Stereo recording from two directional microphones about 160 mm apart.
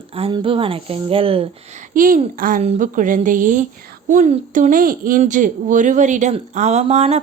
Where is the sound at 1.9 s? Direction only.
60° right (ahead or behind).